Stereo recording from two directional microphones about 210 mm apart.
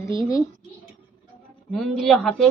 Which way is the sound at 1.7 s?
Centre (ahead or behind).